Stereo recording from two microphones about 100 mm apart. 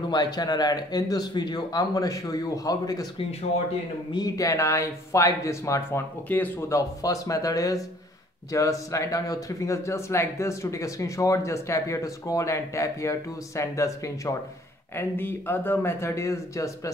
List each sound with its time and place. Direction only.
0.1 s speech: 45° left (ahead or behind)
3.2 s speech: 85° left
4.1 s speech: 35° left (ahead or behind); by 6.5 s 15° left (ahead or behind)
6.7 s speech: 35° left (ahead or behind)